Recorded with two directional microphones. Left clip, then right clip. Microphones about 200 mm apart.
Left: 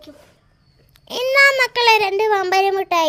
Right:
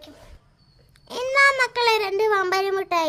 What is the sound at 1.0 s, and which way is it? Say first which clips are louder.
A child's voice: left 4 dB; 15° left (ahead or behind).